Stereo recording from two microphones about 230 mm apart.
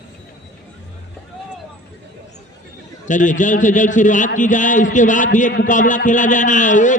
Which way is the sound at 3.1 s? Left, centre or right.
Left.